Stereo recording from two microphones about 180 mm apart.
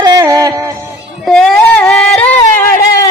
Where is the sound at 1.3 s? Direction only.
5° left (ahead or behind).